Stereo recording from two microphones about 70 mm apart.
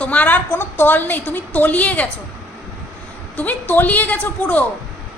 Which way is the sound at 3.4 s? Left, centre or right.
Left.